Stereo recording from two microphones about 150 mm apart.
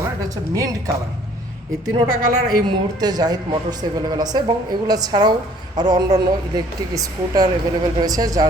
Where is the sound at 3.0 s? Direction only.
25° right (ahead or behind).